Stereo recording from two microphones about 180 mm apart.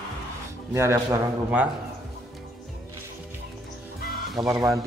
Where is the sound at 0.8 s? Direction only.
15° right (ahead or behind).